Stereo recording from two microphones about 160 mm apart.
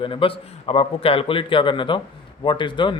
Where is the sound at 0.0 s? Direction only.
35° left (ahead or behind).